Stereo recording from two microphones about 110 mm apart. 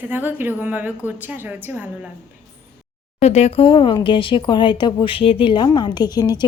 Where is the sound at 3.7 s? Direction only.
50° left (ahead or behind).